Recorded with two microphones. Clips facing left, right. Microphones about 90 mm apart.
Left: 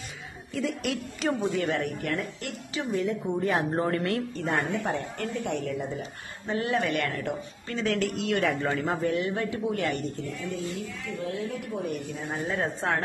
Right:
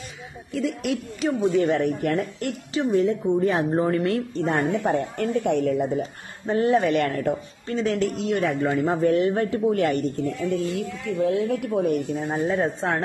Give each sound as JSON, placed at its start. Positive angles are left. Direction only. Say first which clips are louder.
{"t": 0.5, "sound": "speech", "louder": "right 4 dB", "side_deg": 0}
{"t": 1.7, "sound": "speech", "louder": "right 7 dB", "side_deg": -35}
{"t": 2.8, "sound": "a man's voice", "louder": "right 7 dB", "side_deg": -30}
{"t": 6.4, "sound": "speech", "louder": "right 7 dB", "side_deg": -35}
{"t": 7.6, "sound": "a man's voice", "louder": "right 4 dB", "side_deg": -25}
{"t": 8.5, "sound": "a man's voice", "louder": "right 5 dB", "side_deg": -10}
{"t": 9.0, "sound": "speech", "louder": "right 7 dB", "side_deg": -40}
{"t": 10.5, "sound": "a woman's voice", "louder": "right 8 dB", "side_deg": -70}
{"t": 12.4, "sound": "a man's voice", "louder": "right 3 dB", "side_deg": -25}